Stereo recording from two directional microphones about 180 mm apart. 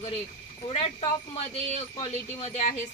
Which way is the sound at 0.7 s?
35° left (ahead or behind).